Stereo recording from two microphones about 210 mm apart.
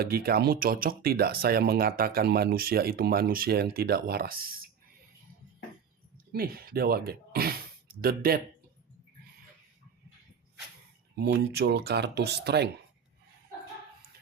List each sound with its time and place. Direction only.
0.0 s speech: 45° right (ahead or behind)
6.3 s speech: 45° right (ahead or behind)
11.1 s speech: 50° right (ahead or behind)